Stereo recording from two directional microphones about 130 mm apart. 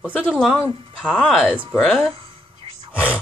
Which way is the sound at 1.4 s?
10° right (ahead or behind).